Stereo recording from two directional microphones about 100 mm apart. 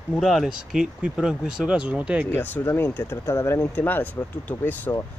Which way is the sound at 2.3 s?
25° left (ahead or behind).